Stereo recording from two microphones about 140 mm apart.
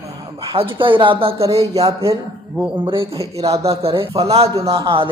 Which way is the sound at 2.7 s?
40° right (ahead or behind).